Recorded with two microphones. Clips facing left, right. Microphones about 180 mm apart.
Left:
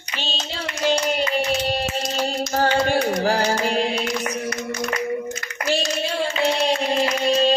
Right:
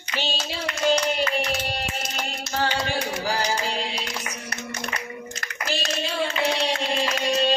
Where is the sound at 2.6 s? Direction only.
45° left (ahead or behind).